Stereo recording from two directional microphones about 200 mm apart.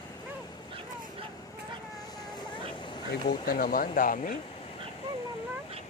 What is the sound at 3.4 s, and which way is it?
Speech, 45° left (ahead or behind).